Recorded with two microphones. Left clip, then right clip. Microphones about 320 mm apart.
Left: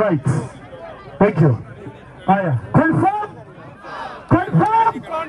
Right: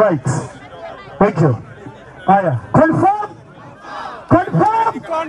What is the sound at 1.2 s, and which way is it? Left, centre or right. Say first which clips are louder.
Speech: right 2 dB; right.